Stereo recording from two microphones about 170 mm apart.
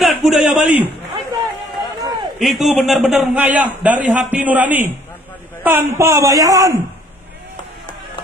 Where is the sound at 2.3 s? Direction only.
Centre (ahead or behind); by 6.8 s 20° right (ahead or behind).